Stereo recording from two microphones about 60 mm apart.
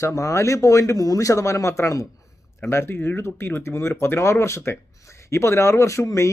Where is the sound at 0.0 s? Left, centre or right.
Left.